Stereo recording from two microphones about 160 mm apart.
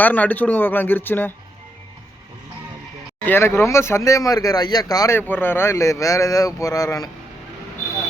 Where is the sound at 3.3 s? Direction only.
15° left (ahead or behind).